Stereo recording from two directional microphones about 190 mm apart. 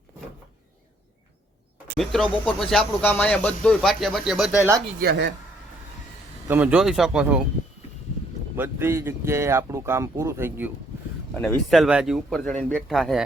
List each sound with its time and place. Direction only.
2.4 s speech: 5° left (ahead or behind)
4.9 s speech: 55° right (ahead or behind)
6.5 s speech: 5° right (ahead or behind)
8.5 s speech: 10° right (ahead or behind)
11.3 s speech: centre (ahead or behind)
12.4 s speech: 10° left (ahead or behind)